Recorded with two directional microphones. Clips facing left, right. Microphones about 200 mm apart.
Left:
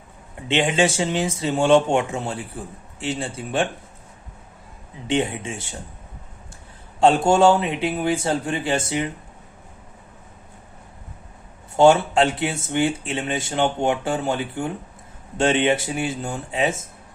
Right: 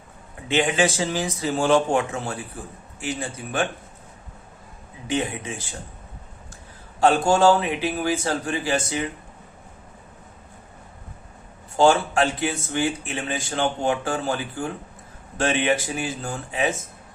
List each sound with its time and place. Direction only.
0.4 s speech: 25° left (ahead or behind)
5.0 s speech: 25° left (ahead or behind)
7.0 s speech: 25° left (ahead or behind)
11.8 s speech: 25° left (ahead or behind)